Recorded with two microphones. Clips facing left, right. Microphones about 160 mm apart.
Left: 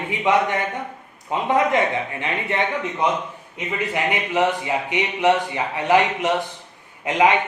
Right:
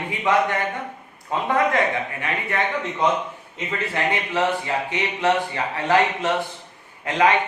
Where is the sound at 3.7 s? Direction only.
15° left (ahead or behind).